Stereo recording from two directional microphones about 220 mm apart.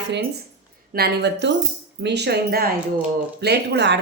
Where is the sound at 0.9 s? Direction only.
45° right (ahead or behind).